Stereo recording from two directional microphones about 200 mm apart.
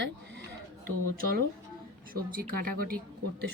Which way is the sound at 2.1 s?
45° right (ahead or behind).